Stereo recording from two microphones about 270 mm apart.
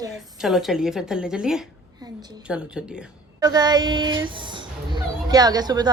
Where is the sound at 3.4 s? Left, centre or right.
Centre.